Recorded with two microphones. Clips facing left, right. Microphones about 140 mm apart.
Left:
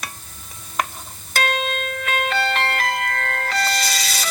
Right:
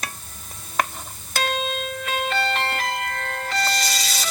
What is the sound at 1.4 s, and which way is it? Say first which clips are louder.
Music: left 2 dB; 65° left (ahead or behind).